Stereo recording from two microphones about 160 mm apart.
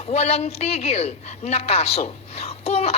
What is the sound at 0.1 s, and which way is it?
A woman's voice, 40° left (ahead or behind).